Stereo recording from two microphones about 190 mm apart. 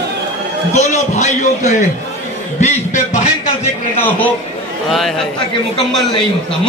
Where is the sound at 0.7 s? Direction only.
40° left (ahead or behind).